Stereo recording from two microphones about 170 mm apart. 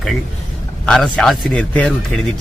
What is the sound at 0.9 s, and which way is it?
Speech, centre (ahead or behind).